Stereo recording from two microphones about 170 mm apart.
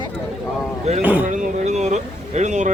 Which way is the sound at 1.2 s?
45° right (ahead or behind).